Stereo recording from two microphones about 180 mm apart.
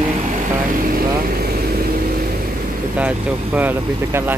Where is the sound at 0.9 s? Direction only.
55° right (ahead or behind).